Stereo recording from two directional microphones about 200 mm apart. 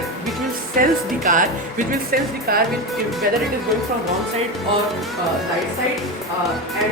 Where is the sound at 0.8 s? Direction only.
40° right (ahead or behind).